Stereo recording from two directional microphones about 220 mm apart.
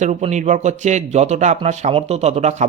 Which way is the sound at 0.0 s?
30° right (ahead or behind).